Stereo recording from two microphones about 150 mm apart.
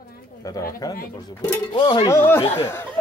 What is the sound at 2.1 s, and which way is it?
Speech, 15° left (ahead or behind).